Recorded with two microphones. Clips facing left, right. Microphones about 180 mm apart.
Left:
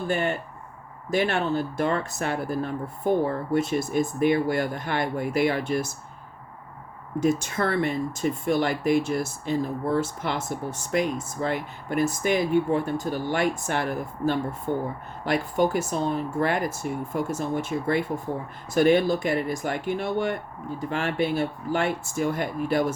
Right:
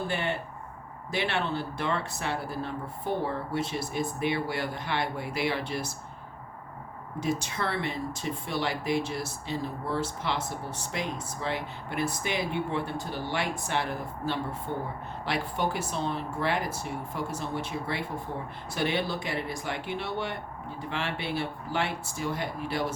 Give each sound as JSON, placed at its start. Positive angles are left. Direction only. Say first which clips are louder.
{"t": 0.1, "sound": "speech", "louder": "left 5 dB", "side_deg": 45}
{"t": 7.2, "sound": "speech", "louder": "left 7 dB", "side_deg": 50}